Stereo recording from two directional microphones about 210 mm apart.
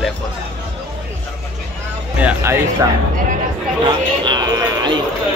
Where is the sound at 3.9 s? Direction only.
20° right (ahead or behind).